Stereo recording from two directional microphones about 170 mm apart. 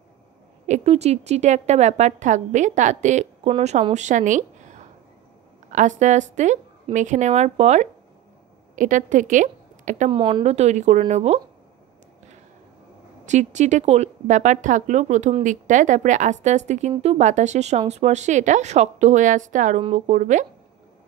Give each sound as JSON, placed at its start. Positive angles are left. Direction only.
{"t": 0.7, "sound": "a woman's voice", "side_deg": -40}
{"t": 10.1, "sound": "speech", "side_deg": -30}
{"t": 10.4, "sound": "speech", "side_deg": -40}
{"t": 13.2, "sound": "a woman's voice", "side_deg": -45}